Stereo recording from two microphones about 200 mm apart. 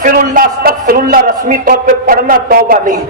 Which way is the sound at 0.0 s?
45° right (ahead or behind).